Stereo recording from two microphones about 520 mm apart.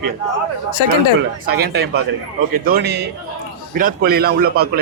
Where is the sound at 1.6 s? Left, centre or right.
Centre.